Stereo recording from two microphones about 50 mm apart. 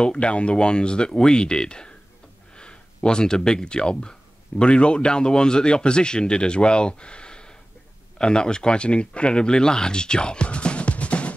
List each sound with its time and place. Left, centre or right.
0.0 s speech: left